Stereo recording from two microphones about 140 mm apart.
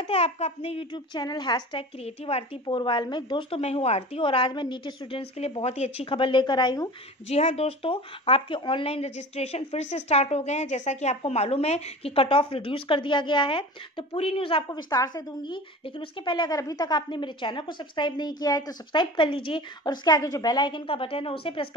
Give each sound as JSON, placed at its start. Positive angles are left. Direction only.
{"t": 0.0, "sound": "a child's voice", "side_deg": 45}
{"t": 7.2, "sound": "speech", "side_deg": 50}
{"t": 14.7, "sound": "a child's voice", "side_deg": 25}